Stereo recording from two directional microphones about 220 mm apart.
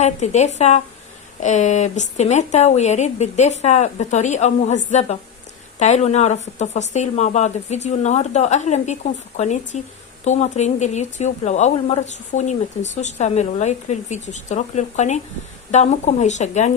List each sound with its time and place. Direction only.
0.0 s speech: 30° left (ahead or behind)